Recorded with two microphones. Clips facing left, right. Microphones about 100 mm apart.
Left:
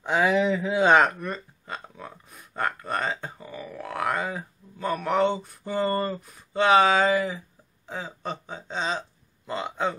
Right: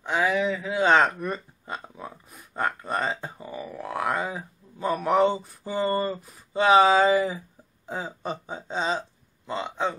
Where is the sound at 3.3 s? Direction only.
20° right (ahead or behind).